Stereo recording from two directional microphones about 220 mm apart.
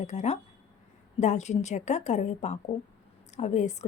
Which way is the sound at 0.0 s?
30° left (ahead or behind).